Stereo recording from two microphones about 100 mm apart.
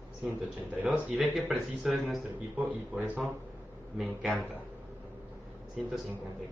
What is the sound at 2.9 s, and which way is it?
Speech, 15° right (ahead or behind).